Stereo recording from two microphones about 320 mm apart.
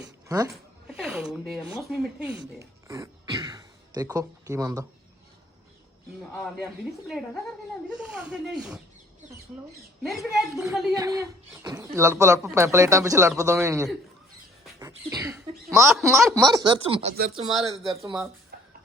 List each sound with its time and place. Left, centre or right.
0.3 s speech: centre
2.6 s throat clearing: centre
6.3 s speech: centre
7.9 s speech: centre; by 17.7 s right
18.0 s speech: centre
18.5 s a sound: right